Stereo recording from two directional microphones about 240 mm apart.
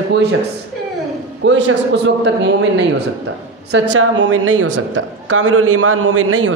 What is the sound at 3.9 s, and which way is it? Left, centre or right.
A man's voice, right.